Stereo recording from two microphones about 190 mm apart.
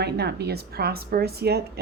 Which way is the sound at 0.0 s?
60° right (ahead or behind).